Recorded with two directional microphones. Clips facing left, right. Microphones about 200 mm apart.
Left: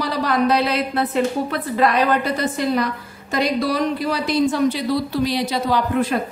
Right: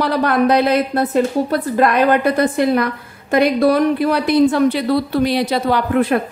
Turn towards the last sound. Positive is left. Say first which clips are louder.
# right 4 dB
turn(degrees=-60)  # may be behind; listen again after turning